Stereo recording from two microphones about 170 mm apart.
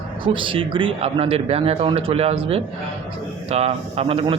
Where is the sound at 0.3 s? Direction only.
30° right (ahead or behind).